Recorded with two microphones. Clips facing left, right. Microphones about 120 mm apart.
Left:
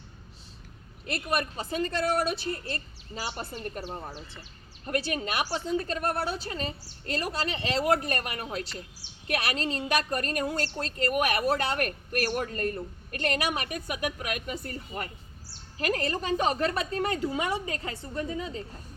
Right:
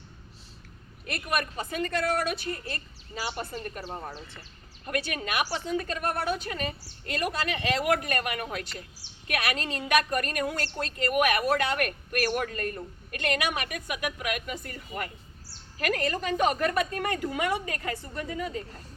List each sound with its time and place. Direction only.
1.0 s a woman's voice: 30° left (ahead or behind)
4.9 s a woman's voice: 30° left (ahead or behind)